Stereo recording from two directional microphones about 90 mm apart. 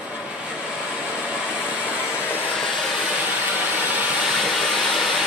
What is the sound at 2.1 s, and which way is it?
Vehicle, 20° left (ahead or behind).